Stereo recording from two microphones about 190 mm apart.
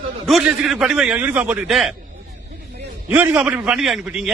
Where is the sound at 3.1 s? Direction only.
10° right (ahead or behind).